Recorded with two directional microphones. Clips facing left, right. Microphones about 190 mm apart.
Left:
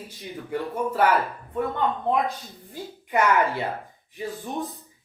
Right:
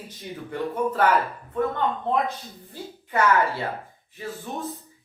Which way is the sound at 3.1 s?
15° left (ahead or behind).